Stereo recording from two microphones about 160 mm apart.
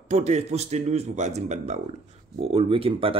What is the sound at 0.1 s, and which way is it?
Speech, 45° right (ahead or behind).